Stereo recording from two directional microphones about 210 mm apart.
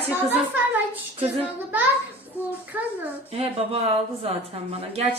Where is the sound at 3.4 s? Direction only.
30° right (ahead or behind).